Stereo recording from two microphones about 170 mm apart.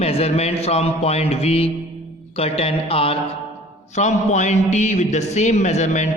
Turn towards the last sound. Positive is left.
turn(degrees=45)  # may be behind; listen again after turning